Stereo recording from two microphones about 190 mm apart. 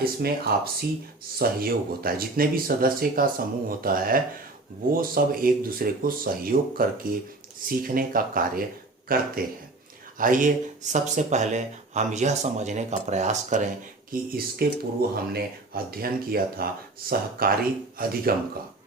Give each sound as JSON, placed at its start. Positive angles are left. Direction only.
{"t": 0.0, "sound": "speech", "side_deg": -50}
{"t": 14.1, "sound": "speech", "side_deg": -55}